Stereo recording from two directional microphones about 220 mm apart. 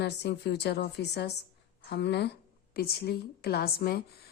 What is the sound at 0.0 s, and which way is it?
A woman's voice, 50° left (ahead or behind).